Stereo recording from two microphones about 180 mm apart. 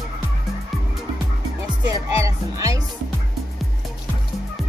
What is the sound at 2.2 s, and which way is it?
Speech, 20° right (ahead or behind).